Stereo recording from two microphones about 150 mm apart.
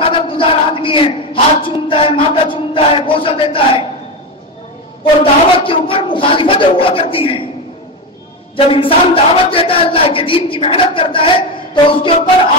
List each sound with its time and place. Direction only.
0.0 s a sound: 35° left (ahead or behind)
5.0 s speech: 35° left (ahead or behind)
8.7 s speech: 35° left (ahead or behind)